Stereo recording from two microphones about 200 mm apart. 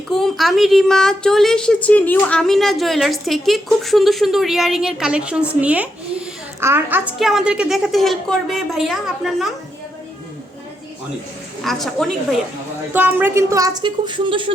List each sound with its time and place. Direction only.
0.1 s speech: centre (ahead or behind)
11.6 s speech: centre (ahead or behind)
12.9 s a woman's voice: 10° right (ahead or behind); by 14.5 s 25° right (ahead or behind)